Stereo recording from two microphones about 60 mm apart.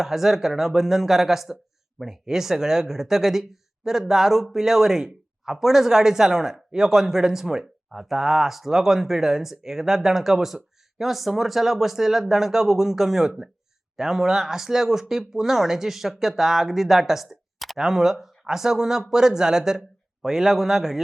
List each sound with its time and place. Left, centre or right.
0.0 s speech: centre